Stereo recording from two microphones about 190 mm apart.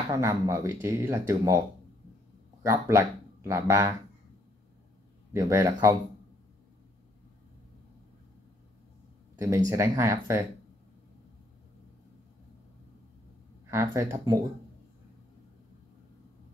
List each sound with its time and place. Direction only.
0.1 s speech: 15° right (ahead or behind)
2.6 s speech: 15° right (ahead or behind)
5.3 s speech: 15° right (ahead or behind)
9.7 s speech: 15° right (ahead or behind)
13.7 s speech: 15° right (ahead or behind)